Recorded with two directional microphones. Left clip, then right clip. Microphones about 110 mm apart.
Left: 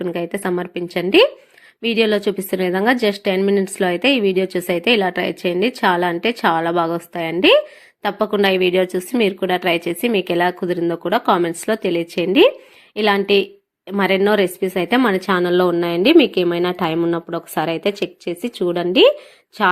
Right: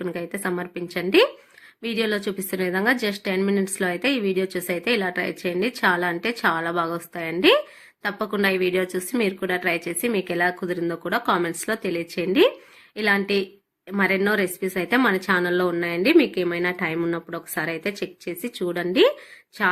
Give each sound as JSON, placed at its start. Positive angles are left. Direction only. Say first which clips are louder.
{"t": 0.1, "sound": "a woman's voice", "louder": "left 6 dB", "side_deg": 45}
{"t": 10.6, "sound": "a woman's voice", "louder": "left 6 dB", "side_deg": 30}
{"t": 17.0, "sound": "a woman's voice", "louder": "left 6 dB", "side_deg": 30}